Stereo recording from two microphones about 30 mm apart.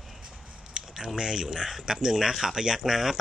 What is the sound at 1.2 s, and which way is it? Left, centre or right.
Speech, right.